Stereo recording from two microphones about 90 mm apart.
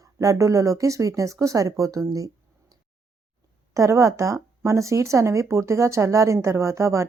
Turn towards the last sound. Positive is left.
turn(degrees=-35)  # may be behind; listen again after turning